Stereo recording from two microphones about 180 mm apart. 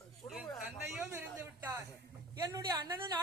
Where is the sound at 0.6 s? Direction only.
10° right (ahead or behind).